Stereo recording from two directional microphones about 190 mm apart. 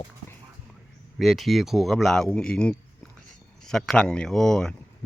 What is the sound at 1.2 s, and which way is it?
A man's voice, centre (ahead or behind).